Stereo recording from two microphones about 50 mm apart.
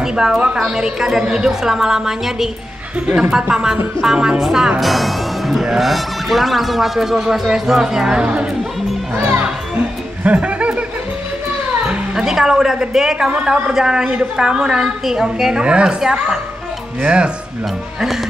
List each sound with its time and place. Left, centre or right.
0.0 s a woman's voice: centre
10.2 s speech: right
11.9 s a woman's voice: centre